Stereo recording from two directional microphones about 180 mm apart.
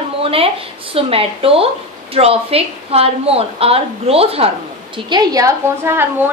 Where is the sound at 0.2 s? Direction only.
30° right (ahead or behind).